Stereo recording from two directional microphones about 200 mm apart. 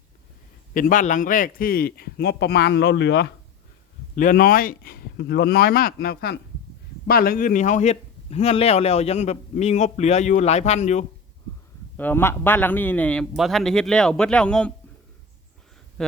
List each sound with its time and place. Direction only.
0.7 s a man's voice: 40° left (ahead or behind); by 3.2 s 60° left (ahead or behind)
4.1 s a man's voice: 40° left (ahead or behind)
11.9 s a man's voice: 10° left (ahead or behind)
16.0 s speech: 5° left (ahead or behind)